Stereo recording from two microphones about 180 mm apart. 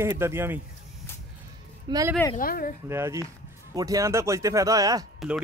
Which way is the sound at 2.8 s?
15° right (ahead or behind).